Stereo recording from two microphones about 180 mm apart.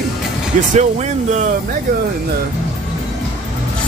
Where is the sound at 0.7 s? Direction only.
40° right (ahead or behind).